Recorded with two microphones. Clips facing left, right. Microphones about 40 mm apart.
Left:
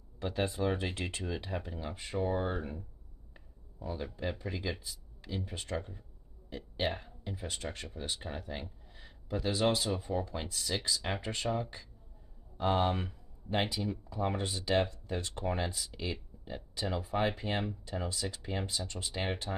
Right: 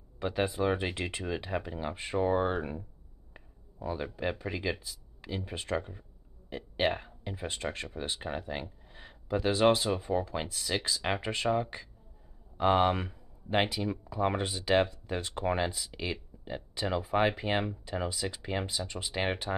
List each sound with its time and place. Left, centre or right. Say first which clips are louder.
0.2 s speech: right 3 dB; right
1.8 s speech: right 5 dB; right
3.3 s finger snapping: right 5 dB; right
4.4 s speech: right 4 dB; right
7.2 s speech: right 4 dB; right
8.9 s a sound: right 5 dB; right
10.0 s speech: right 4 dB; right
12.5 s speech: right 5 dB; right